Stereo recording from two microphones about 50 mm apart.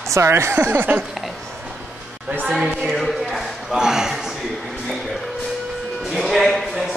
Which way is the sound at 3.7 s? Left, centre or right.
Centre.